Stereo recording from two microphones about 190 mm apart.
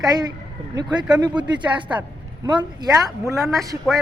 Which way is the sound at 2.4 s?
25° right (ahead or behind).